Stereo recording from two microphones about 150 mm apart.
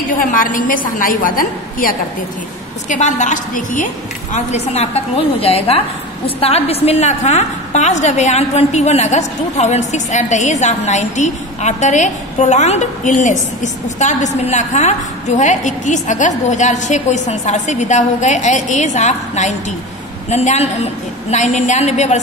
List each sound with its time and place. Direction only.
0.2 s a woman's voice: 65° left (ahead or behind)
2.9 s a woman's voice: 55° left (ahead or behind)